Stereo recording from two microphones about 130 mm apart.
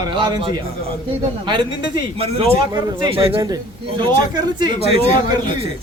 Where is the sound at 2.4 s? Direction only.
35° right (ahead or behind).